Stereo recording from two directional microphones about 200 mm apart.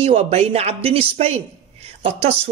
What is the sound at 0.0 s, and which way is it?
Speech, 30° right (ahead or behind).